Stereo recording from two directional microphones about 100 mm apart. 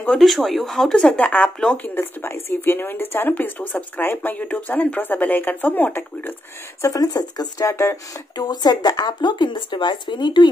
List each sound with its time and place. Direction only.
0.2 s speech: centre (ahead or behind); by 6.3 s 20° left (ahead or behind)
6.8 s speech: 35° left (ahead or behind)
8.4 s speech: 45° left (ahead or behind)